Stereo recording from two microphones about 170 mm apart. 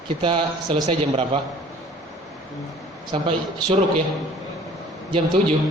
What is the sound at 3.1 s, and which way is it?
Speech, 35° right (ahead or behind).